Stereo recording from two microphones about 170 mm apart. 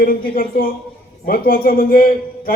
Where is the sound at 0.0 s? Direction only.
60° left (ahead or behind).